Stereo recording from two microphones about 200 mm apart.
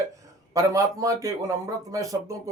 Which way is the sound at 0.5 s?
15° right (ahead or behind).